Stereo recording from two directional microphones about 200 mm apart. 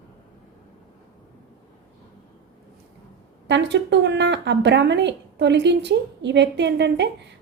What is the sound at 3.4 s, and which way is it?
Speech, 60° right (ahead or behind).